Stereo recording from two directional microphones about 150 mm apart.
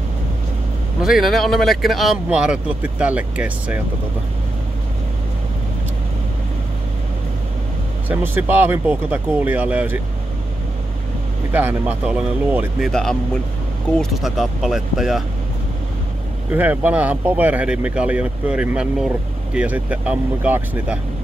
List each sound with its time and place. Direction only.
1.0 s speech: centre (ahead or behind)
8.1 s speech: 10° right (ahead or behind)
11.5 s speech: 10° right (ahead or behind)
12.9 s speech: 5° left (ahead or behind)
16.5 s speech: 10° right (ahead or behind)